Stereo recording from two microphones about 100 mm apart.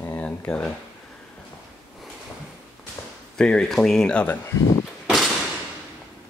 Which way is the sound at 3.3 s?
5° left (ahead or behind).